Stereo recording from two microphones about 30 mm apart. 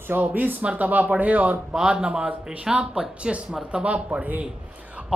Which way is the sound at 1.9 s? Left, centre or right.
Right.